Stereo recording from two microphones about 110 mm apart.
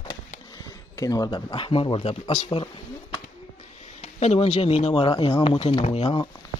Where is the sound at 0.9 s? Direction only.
35° left (ahead or behind); by 2.1 s 55° left (ahead or behind).